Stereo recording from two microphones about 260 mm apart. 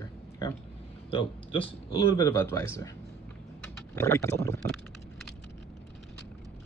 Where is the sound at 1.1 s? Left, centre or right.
Left.